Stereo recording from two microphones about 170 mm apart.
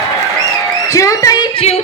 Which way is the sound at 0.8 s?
20° left (ahead or behind).